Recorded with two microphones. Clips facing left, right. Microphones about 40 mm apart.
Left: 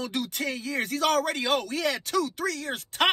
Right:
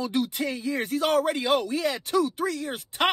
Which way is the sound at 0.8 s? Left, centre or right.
Left.